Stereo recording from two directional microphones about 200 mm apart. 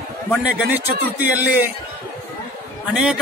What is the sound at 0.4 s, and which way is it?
A man's voice, 10° right (ahead or behind).